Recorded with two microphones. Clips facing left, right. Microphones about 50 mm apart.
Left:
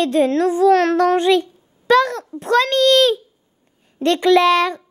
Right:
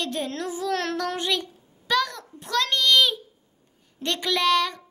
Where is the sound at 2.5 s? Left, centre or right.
Left.